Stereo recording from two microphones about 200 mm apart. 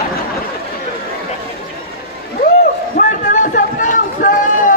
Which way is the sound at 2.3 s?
40° left (ahead or behind).